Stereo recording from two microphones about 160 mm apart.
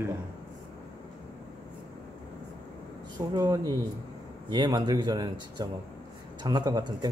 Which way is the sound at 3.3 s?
25° right (ahead or behind).